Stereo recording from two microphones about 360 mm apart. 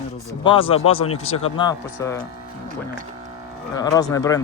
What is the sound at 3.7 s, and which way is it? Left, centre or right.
Speech, centre.